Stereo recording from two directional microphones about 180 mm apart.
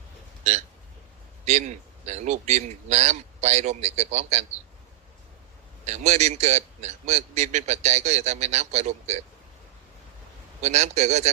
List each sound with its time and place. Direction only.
0.4 s a man's voice: 40° right (ahead or behind)
5.8 s a man's voice: 40° right (ahead or behind)
10.6 s a man's voice: 40° right (ahead or behind)